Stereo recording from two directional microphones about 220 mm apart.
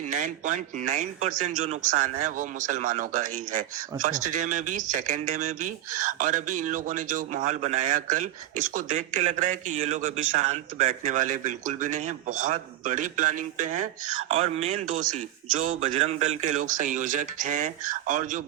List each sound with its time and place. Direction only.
0.1 s speech: 35° right (ahead or behind)